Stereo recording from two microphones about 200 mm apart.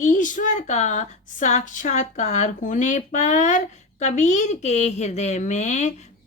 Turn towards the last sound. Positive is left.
turn(degrees=35)  # may be behind; listen again after turning